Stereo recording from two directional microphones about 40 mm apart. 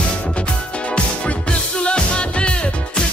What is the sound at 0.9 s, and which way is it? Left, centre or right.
Music, left.